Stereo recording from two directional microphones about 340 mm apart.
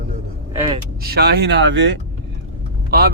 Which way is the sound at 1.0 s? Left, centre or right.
Right.